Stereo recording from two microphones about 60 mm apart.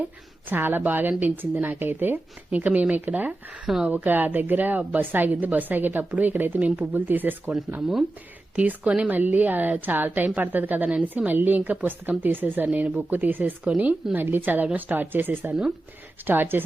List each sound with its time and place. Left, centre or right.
0.5 s a woman's voice: right
8.5 s a woman's voice: right